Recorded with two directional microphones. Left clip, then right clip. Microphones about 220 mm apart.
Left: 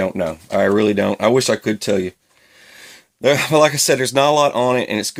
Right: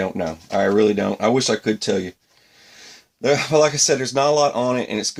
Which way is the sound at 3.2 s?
40° left (ahead or behind).